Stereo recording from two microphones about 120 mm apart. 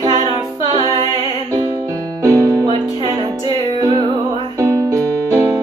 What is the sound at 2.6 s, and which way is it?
Music, 50° right (ahead or behind).